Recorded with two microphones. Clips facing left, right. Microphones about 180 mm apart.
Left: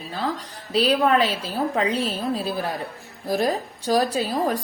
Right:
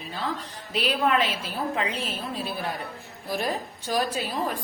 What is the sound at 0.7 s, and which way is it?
A woman's voice, 35° left (ahead or behind).